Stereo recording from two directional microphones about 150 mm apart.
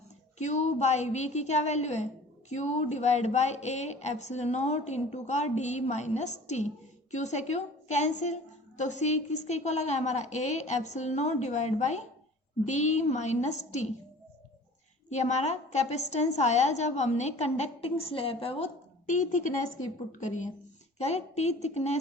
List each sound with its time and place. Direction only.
0.3 s a woman's voice: 50° left (ahead or behind)
15.1 s a woman's voice: 50° left (ahead or behind)
19.0 s a woman's voice: 55° left (ahead or behind)